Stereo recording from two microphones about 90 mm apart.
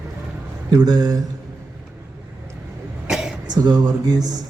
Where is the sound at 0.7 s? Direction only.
45° right (ahead or behind).